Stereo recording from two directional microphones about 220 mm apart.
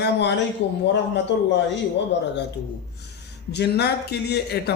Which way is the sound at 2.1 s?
55° left (ahead or behind).